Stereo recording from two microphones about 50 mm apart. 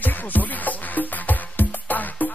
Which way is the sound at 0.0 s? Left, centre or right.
Left.